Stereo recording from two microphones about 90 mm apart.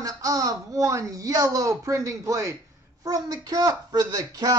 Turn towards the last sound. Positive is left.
turn(degrees=-45)  # may be behind; listen again after turning